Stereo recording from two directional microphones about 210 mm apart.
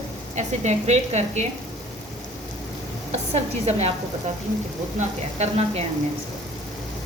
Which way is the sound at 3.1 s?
30° right (ahead or behind).